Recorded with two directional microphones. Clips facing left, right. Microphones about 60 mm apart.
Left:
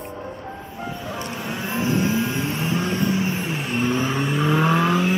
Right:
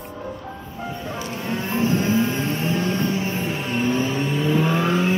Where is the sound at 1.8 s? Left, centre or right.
Right.